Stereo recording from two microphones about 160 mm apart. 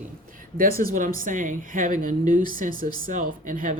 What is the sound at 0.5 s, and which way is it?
Speech, 60° right (ahead or behind).